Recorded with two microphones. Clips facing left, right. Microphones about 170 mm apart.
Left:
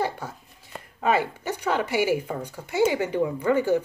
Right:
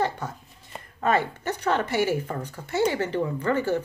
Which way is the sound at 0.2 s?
10° left (ahead or behind).